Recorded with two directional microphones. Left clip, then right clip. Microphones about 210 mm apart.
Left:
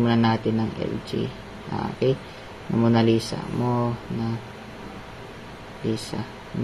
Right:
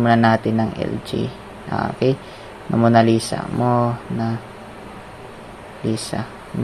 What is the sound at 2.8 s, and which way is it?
Speech, 20° right (ahead or behind).